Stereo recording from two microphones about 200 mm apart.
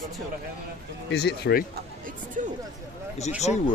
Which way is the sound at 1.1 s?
55° left (ahead or behind).